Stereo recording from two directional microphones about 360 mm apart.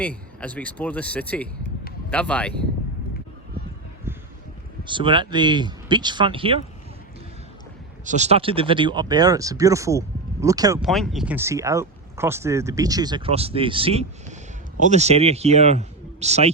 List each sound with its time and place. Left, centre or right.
0.0 s speech: centre
4.8 s speech: centre
8.0 s speech: centre